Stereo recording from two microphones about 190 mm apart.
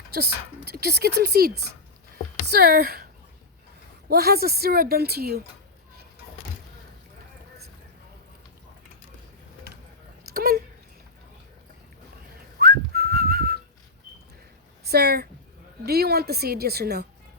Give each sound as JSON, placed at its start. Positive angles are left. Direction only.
{"t": 0.1, "sound": "speech", "side_deg": -55}
{"t": 4.1, "sound": "speech", "side_deg": -55}
{"t": 10.3, "sound": "a sound", "side_deg": -55}
{"t": 12.5, "sound": "whistling", "side_deg": -55}
{"t": 14.8, "sound": "speech", "side_deg": -55}